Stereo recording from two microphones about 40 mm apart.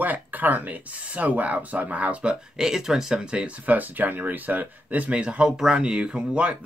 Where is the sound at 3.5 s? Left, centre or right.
Right.